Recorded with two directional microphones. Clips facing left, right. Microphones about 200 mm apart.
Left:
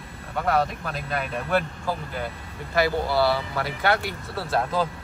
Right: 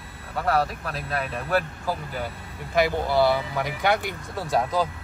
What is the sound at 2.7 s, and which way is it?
Speech, 20° right (ahead or behind).